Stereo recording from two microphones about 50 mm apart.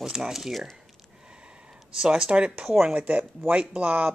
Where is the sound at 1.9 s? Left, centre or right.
Centre.